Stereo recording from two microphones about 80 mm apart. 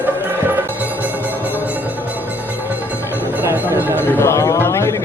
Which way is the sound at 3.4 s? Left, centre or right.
Right.